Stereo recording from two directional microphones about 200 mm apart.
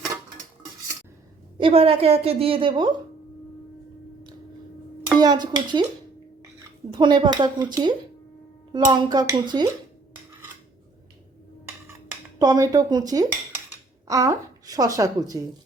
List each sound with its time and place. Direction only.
1.5 s a woman's voice: 25° right (ahead or behind)
5.0 s speech: 20° right (ahead or behind)
6.9 s a woman's voice: 20° right (ahead or behind)
12.4 s a woman's voice: 20° right (ahead or behind)